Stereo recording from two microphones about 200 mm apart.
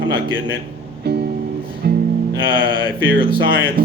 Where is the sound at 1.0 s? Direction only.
55° right (ahead or behind).